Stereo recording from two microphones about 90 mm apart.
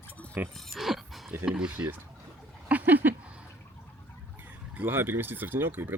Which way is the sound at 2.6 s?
20° right (ahead or behind).